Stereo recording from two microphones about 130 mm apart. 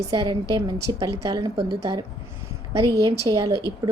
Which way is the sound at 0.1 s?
25° right (ahead or behind).